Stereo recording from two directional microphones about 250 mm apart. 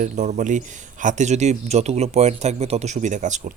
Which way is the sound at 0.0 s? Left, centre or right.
Right.